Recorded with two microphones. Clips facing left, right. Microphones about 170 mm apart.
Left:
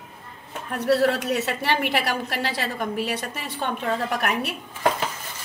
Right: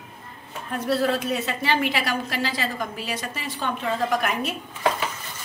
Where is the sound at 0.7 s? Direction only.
70° left (ahead or behind).